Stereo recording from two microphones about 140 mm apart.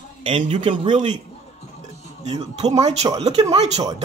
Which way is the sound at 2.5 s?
50° right (ahead or behind).